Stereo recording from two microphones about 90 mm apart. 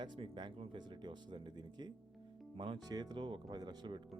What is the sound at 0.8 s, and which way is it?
Speech, 55° right (ahead or behind).